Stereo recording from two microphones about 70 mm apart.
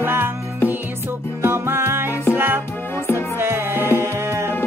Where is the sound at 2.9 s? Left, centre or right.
Left.